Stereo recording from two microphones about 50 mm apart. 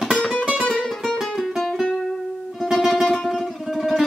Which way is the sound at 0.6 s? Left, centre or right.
Centre.